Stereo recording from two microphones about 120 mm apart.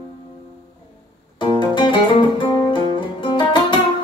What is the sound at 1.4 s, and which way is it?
Music, 40° left (ahead or behind).